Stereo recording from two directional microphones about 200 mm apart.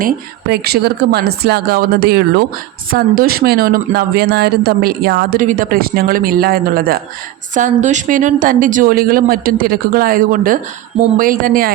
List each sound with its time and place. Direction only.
0.0 s speech: 50° right (ahead or behind)
7.5 s speech: 40° right (ahead or behind)